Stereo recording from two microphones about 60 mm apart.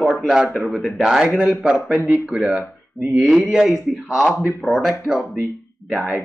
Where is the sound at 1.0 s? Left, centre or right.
Centre.